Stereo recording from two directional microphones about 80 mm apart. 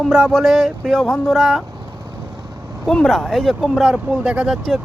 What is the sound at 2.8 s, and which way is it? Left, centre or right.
Speech, centre.